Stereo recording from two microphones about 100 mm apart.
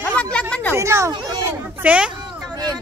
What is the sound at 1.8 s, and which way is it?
Speech, 10° right (ahead or behind).